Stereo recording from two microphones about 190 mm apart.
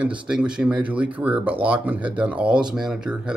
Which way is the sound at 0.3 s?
5° right (ahead or behind).